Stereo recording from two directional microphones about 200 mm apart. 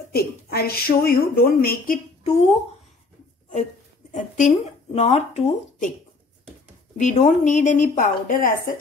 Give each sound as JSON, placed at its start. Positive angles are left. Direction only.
{"t": 0.1, "sound": "a woman's voice", "side_deg": 50}
{"t": 2.2, "sound": "speech", "side_deg": 30}
{"t": 4.1, "sound": "speech", "side_deg": 40}
{"t": 7.0, "sound": "speech", "side_deg": 40}